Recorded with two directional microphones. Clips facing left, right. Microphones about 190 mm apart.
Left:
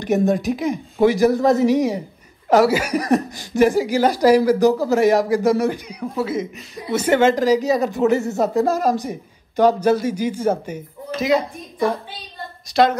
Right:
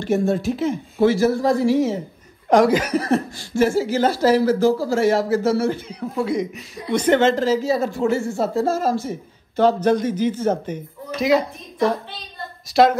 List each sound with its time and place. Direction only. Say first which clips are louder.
0.0 s speech: left 1 dB; 15° left (ahead or behind)
2.5 s speech: even; 5° left (ahead or behind)
6.2 s a woman's voice: right 2 dB; centre (ahead or behind)